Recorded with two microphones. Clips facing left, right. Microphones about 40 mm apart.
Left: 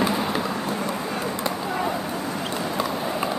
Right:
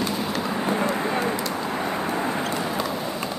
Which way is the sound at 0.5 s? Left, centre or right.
Right.